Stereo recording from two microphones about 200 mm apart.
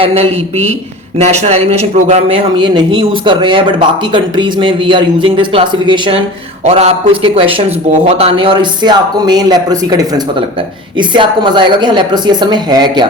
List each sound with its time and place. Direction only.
0.0 s a man's voice: 30° right (ahead or behind)